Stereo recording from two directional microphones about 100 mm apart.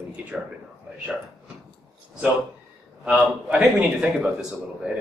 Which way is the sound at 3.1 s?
10° right (ahead or behind).